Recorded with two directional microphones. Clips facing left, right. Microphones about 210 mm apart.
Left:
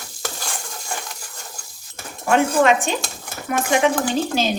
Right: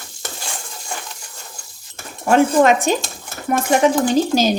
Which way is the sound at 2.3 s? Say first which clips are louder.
Right 3 dB; 40° right (ahead or behind).